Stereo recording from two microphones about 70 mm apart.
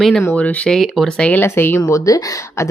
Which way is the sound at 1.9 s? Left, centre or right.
Left.